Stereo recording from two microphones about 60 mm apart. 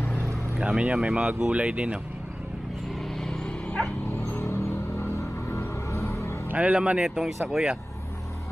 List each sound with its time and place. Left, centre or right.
0.6 s speech: centre
3.3 s dog: centre
4.3 s vehicle: left
5.5 s music: left
6.5 s speech: centre